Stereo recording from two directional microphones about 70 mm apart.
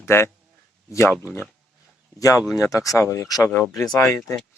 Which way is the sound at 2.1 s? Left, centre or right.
Left.